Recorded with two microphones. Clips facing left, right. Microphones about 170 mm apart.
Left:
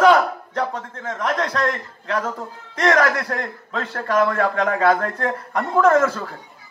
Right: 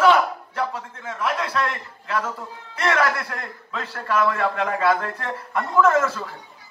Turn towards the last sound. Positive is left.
turn(degrees=50)  # may be behind; listen again after turning